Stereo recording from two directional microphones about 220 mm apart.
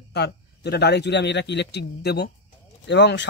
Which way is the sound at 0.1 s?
50° left (ahead or behind).